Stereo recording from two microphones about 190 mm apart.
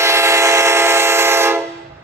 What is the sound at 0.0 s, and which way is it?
Train, 15° right (ahead or behind).